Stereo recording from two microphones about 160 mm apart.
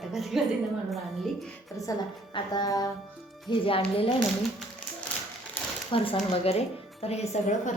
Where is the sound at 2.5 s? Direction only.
25° left (ahead or behind).